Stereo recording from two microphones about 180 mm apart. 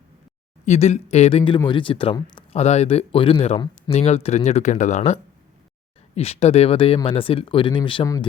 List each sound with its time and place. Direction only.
0.6 s speech: 35° left (ahead or behind)